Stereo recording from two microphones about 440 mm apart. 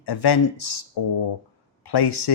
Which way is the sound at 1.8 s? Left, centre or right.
Left.